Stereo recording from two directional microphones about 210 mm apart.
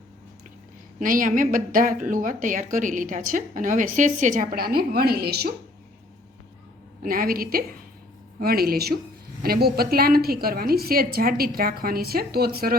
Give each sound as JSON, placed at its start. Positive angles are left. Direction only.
{"t": 0.9, "sound": "a woman's voice", "side_deg": -40}
{"t": 7.0, "sound": "a woman's voice", "side_deg": -45}